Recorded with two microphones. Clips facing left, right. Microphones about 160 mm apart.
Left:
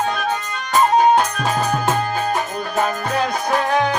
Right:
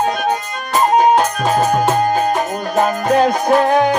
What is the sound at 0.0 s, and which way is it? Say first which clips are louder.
Music: right 4 dB; 40° right (ahead or behind).